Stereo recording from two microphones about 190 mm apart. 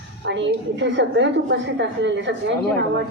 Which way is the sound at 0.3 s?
70° right (ahead or behind).